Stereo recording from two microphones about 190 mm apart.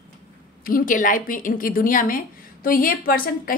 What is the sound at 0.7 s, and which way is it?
A woman's voice, 45° left (ahead or behind).